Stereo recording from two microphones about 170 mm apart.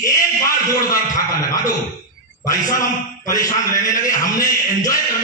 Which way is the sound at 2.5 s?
20° left (ahead or behind).